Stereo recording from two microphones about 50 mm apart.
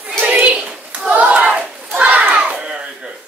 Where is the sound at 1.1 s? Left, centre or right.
Right.